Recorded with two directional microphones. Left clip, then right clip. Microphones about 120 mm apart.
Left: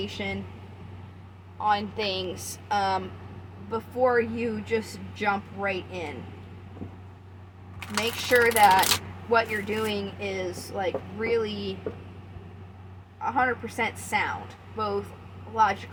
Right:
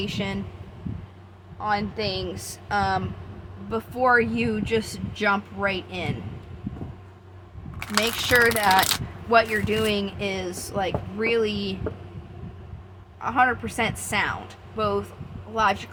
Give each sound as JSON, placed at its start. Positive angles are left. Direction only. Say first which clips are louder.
{"t": 0.0, "sound": "speech", "louder": "right 3 dB", "side_deg": -55}
{"t": 1.6, "sound": "a woman's voice", "louder": "even", "side_deg": -35}
{"t": 3.7, "sound": "speech", "louder": "right 4 dB", "side_deg": -60}
{"t": 7.8, "sound": "speech", "louder": "right 5 dB", "side_deg": -50}
{"t": 13.2, "sound": "speech", "louder": "right 4 dB", "side_deg": -60}